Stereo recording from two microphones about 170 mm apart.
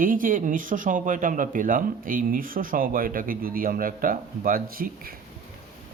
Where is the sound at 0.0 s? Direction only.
55° right (ahead or behind).